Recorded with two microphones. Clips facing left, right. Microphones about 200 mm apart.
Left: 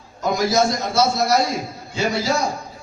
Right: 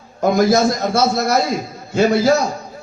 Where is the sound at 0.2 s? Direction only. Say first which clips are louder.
Right 5 dB; 55° right (ahead or behind).